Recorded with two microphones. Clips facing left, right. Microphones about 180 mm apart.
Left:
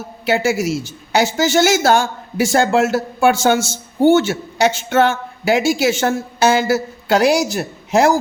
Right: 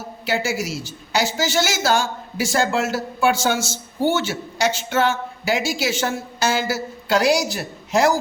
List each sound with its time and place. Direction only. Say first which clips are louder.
0.3 s a woman's voice: left 7 dB; 55° left (ahead or behind)